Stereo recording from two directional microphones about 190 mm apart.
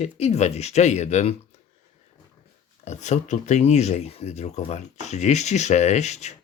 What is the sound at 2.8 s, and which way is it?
Speech, 40° left (ahead or behind).